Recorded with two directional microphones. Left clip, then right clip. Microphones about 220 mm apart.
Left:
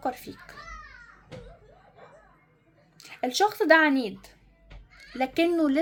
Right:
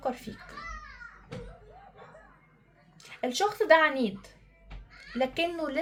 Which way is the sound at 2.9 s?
50° left (ahead or behind).